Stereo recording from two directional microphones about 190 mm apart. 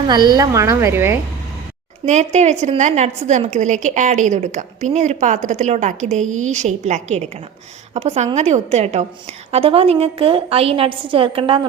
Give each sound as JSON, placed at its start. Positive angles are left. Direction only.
{"t": 0.1, "sound": "a woman's voice", "side_deg": -20}
{"t": 2.0, "sound": "a woman's voice", "side_deg": -35}